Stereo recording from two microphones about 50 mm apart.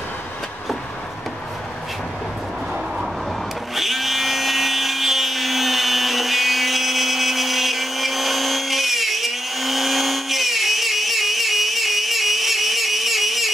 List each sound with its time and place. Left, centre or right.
3.7 s wood: centre